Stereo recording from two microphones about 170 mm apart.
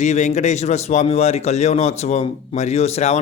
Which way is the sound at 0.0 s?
45° left (ahead or behind).